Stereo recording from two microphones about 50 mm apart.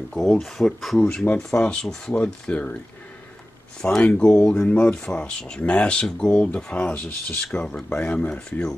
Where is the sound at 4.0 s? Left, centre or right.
Centre.